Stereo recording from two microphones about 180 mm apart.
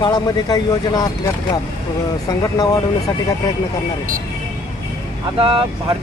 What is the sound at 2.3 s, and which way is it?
Speech, 20° left (ahead or behind).